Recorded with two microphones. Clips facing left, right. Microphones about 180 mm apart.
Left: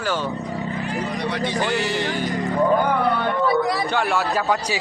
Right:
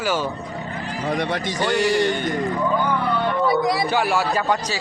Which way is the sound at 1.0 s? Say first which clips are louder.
Right 1 dB; 50° right (ahead or behind).